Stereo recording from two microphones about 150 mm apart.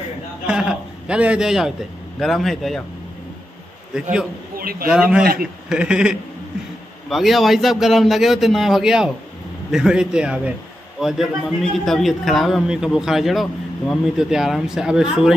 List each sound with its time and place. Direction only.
0.5 s a man's voice: 5° right (ahead or behind)
3.9 s a man's voice: 5° right (ahead or behind)
4.6 s speech: 75° right (ahead or behind)
4.8 s a man's voice: 5° right (ahead or behind)
5.2 s a man's voice: 75° right (ahead or behind)
5.7 s a man's voice: 5° right (ahead or behind)